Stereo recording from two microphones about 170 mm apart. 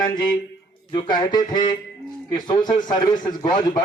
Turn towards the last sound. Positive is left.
turn(degrees=25)  # may be behind; listen again after turning